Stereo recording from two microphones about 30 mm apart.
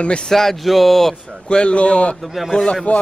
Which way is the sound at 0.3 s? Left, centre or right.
Centre.